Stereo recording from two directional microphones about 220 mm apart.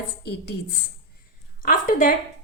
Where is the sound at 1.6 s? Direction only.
40° left (ahead or behind).